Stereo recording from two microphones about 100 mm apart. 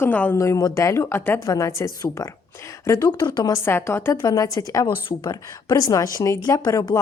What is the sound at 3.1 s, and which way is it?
Speech, 50° left (ahead or behind).